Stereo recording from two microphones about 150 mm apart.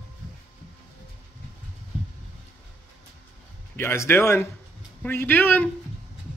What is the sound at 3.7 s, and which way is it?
Speech, 15° left (ahead or behind).